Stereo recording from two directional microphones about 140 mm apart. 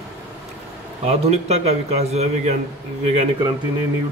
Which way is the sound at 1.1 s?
50° right (ahead or behind).